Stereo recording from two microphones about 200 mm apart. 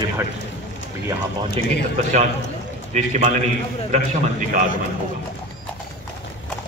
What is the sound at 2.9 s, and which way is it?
A man's voice, 40° right (ahead or behind).